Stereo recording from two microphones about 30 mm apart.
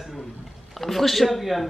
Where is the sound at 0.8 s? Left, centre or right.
Centre.